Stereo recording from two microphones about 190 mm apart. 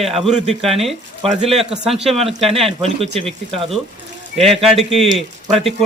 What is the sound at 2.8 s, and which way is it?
Speech, 30° right (ahead or behind).